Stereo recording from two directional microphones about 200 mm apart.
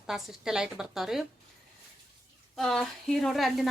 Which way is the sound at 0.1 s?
5° right (ahead or behind).